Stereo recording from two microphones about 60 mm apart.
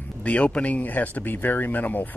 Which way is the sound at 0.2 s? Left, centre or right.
Left.